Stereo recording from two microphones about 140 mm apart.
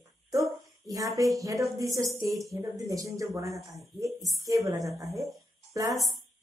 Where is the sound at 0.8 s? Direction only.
25° right (ahead or behind).